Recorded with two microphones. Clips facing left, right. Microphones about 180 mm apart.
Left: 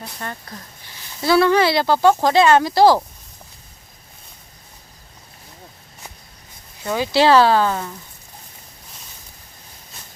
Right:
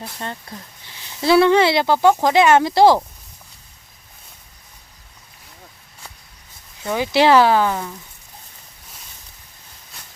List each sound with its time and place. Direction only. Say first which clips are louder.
0.2 s speech: right 1 dB; 20° right (ahead or behind)
6.8 s speech: even; 20° right (ahead or behind)